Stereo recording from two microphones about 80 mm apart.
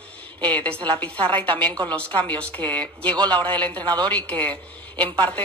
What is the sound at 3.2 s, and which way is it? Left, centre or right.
Speech, right.